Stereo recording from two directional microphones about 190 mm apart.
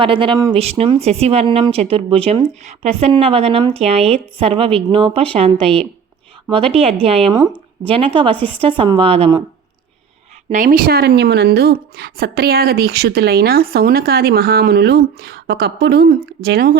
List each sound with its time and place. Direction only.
0.0 s a woman's voice: 25° right (ahead or behind)
0.5 s a woman's voice: 30° right (ahead or behind)
10.5 s a woman's voice: 45° right (ahead or behind)